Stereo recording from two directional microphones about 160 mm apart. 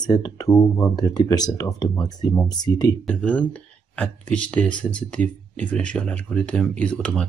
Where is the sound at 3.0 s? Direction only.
10° left (ahead or behind).